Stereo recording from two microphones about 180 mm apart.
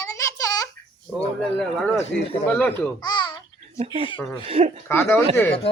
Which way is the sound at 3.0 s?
25° left (ahead or behind).